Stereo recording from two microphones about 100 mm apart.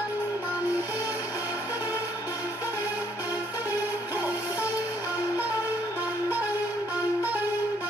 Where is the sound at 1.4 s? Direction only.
20° right (ahead or behind).